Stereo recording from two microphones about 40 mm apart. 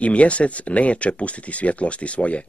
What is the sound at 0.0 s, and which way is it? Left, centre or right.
Speech, left.